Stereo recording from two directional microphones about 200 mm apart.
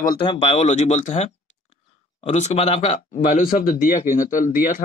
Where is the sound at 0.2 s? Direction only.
30° left (ahead or behind).